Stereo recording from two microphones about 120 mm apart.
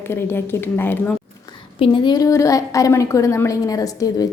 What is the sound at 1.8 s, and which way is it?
A woman's voice, 40° left (ahead or behind).